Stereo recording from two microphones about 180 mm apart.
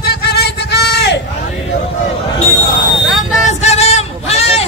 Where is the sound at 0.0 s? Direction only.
65° left (ahead or behind).